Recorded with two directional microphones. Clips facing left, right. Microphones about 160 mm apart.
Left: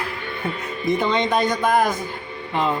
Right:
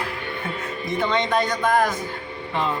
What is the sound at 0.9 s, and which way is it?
A man's voice, 15° left (ahead or behind).